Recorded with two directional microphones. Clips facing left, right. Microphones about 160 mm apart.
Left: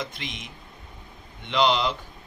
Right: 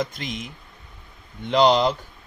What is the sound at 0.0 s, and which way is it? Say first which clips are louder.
Speech: right 6 dB; 40° right (ahead or behind).